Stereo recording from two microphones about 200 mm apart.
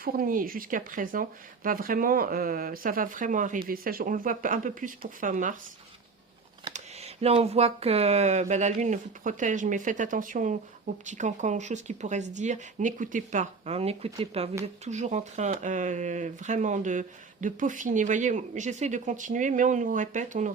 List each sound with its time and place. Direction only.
0.0 s speech: 45° right (ahead or behind)
6.7 s speech: 30° right (ahead or behind)